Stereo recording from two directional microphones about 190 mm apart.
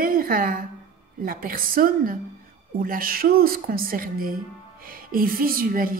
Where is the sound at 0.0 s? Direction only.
50° right (ahead or behind).